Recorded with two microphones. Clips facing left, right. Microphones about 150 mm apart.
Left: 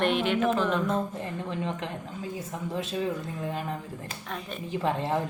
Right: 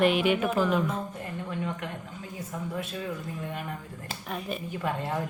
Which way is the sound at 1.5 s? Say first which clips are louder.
Even; 25° left (ahead or behind).